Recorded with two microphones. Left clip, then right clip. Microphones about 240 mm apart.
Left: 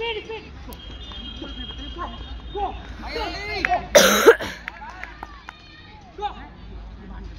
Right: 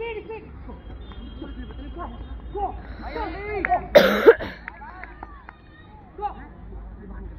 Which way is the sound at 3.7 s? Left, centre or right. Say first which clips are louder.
Even; centre.